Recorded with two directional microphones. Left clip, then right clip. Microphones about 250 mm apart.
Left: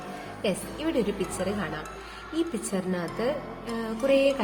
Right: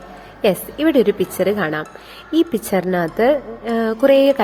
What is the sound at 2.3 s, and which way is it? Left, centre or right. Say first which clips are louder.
A woman's voice: right 13 dB; right.